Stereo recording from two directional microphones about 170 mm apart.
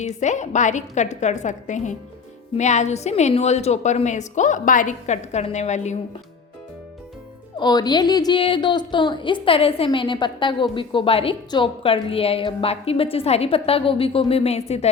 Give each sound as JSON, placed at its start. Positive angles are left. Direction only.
{"t": 0.0, "sound": "a woman's voice", "side_deg": 45}
{"t": 7.6, "sound": "speech", "side_deg": 25}